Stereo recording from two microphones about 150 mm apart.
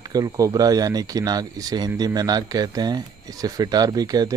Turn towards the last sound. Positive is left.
turn(degrees=-25)  # may be behind; listen again after turning